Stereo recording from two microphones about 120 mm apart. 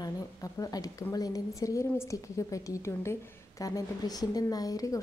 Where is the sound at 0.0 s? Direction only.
30° left (ahead or behind).